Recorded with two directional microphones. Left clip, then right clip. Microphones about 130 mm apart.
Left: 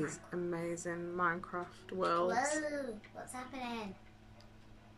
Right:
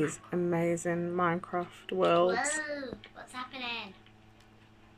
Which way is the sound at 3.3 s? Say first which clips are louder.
Right 6 dB; 50° left (ahead or behind).